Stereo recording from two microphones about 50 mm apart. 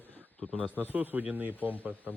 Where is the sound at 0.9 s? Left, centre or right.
Right.